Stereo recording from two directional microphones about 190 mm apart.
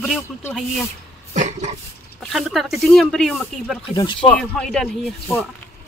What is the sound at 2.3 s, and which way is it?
Speech, centre (ahead or behind).